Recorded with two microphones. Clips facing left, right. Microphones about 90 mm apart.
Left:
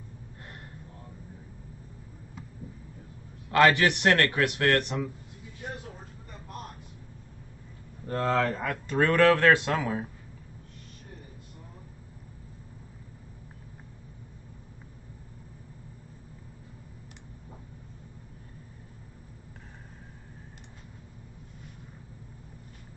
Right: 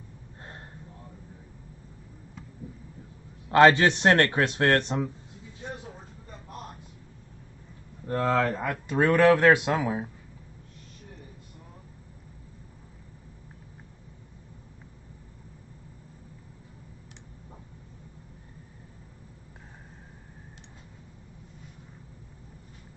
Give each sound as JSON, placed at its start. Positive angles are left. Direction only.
{"t": 0.4, "sound": "a sound", "side_deg": -25}
{"t": 3.4, "sound": "a man's voice", "side_deg": -25}
{"t": 8.1, "sound": "speech", "side_deg": -10}